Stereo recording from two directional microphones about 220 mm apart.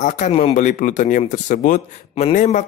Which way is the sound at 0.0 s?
35° left (ahead or behind).